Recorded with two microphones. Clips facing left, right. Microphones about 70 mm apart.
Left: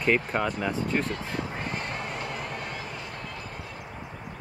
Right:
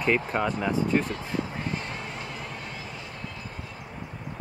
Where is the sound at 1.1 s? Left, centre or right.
Left.